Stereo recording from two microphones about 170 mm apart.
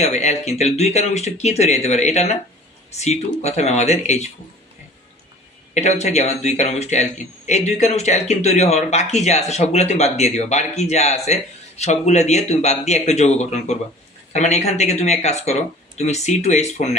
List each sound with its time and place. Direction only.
0.0 s a man's voice: 40° left (ahead or behind)
5.8 s a man's voice: 40° left (ahead or behind)